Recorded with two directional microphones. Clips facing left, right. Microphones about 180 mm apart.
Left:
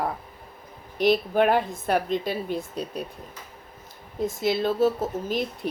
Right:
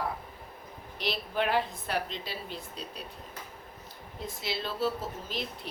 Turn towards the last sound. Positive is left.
turn(degrees=50)  # may be behind; listen again after turning